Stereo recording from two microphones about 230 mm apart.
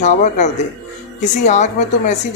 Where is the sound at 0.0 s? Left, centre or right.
Left.